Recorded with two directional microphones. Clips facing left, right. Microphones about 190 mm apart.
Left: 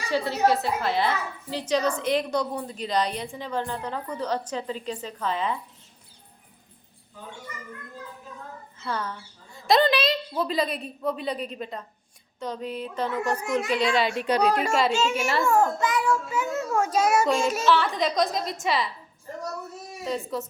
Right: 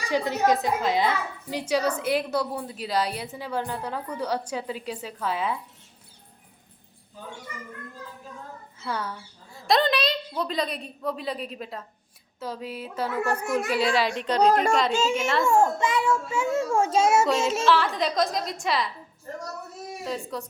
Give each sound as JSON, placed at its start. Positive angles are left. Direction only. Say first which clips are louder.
{"t": 0.1, "sound": "a woman's voice", "louder": "even", "side_deg": -15}
{"t": 8.8, "sound": "speech", "louder": "even", "side_deg": -10}
{"t": 9.6, "sound": "a woman's voice", "louder": "left 2 dB", "side_deg": 0}
{"t": 14.2, "sound": "a woman's voice", "louder": "right 2 dB", "side_deg": 10}
{"t": 15.4, "sound": "a child's voice", "louder": "right 1 dB", "side_deg": -25}
{"t": 17.7, "sound": "a woman's voice", "louder": "left 1 dB", "side_deg": 0}
{"t": 20.1, "sound": "a woman's voice", "louder": "left 3 dB", "side_deg": 0}